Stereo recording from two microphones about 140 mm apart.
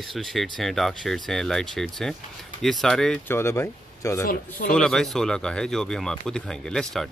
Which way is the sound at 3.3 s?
20° left (ahead or behind).